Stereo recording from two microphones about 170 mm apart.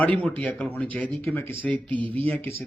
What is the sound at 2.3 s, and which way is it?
Speech, 15° left (ahead or behind).